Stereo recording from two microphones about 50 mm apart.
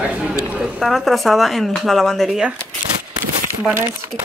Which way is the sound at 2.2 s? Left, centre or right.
Centre.